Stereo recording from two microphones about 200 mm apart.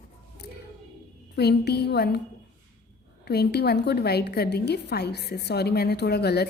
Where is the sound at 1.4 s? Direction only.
55° left (ahead or behind).